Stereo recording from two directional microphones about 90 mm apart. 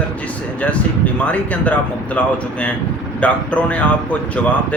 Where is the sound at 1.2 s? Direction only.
15° left (ahead or behind).